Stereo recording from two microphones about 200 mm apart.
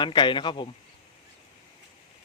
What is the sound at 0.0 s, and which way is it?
Speech, 25° left (ahead or behind).